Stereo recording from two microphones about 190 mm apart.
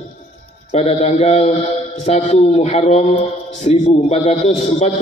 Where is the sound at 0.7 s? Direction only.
35° left (ahead or behind).